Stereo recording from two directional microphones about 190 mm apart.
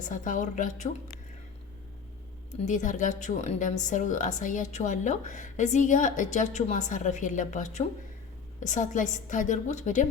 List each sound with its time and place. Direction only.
0.0 s speech: 40° left (ahead or behind)
2.6 s speech: 40° left (ahead or behind)